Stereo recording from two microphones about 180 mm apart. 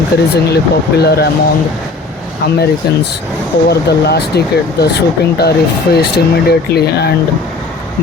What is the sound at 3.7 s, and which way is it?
Speech, 65° left (ahead or behind).